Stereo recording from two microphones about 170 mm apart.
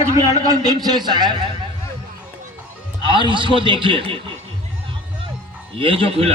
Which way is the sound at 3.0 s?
30° right (ahead or behind).